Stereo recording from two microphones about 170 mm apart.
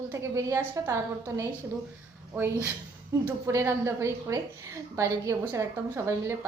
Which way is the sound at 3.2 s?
15° right (ahead or behind).